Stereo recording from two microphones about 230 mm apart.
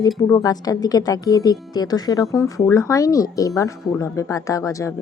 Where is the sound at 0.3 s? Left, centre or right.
Centre.